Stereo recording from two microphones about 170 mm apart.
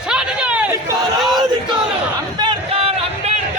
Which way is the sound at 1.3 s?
25° right (ahead or behind).